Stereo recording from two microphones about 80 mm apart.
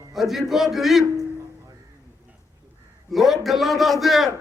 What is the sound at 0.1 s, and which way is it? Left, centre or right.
Speech, centre.